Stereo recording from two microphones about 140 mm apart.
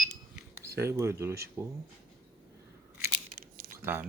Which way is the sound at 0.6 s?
20° right (ahead or behind).